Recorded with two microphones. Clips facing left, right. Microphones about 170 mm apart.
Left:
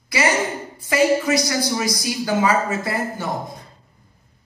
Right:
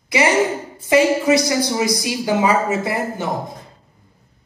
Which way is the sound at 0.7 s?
25° right (ahead or behind).